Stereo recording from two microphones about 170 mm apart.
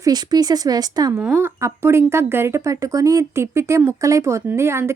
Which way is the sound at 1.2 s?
10° right (ahead or behind).